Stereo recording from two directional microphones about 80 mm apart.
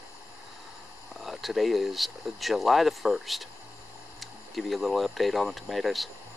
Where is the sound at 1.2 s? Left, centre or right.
Centre.